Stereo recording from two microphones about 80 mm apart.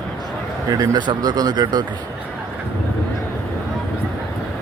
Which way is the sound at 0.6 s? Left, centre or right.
Right.